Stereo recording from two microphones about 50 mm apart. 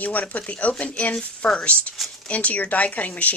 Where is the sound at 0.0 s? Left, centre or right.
Left.